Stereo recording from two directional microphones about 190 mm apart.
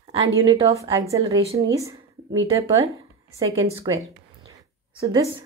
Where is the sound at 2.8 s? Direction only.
15° right (ahead or behind).